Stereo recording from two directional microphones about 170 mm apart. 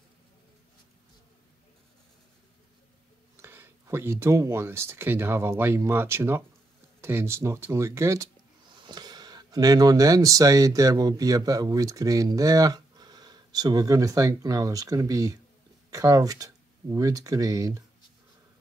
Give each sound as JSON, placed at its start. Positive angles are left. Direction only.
{"t": 3.3, "sound": "speech", "side_deg": -15}